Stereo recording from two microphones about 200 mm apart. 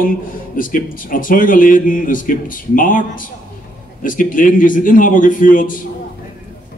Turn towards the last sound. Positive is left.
turn(degrees=40)  # may be behind; listen again after turning